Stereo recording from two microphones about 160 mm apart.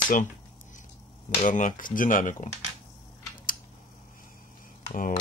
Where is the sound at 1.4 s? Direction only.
55° left (ahead or behind).